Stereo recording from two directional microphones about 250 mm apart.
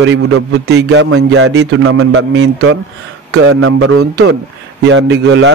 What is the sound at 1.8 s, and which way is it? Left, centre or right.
Speech, right.